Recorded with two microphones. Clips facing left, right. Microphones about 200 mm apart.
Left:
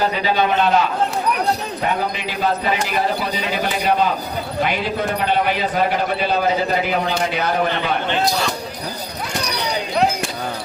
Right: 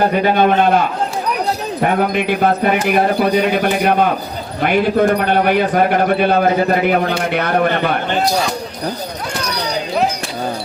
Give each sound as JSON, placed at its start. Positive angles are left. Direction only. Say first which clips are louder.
{"t": 0.0, "sound": "a man's voice", "louder": "right 6 dB", "side_deg": -55}